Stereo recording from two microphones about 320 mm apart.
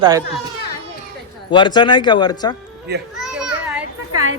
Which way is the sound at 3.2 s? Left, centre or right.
Centre.